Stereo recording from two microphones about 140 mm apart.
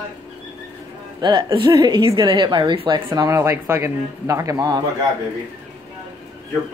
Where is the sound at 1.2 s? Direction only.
35° right (ahead or behind).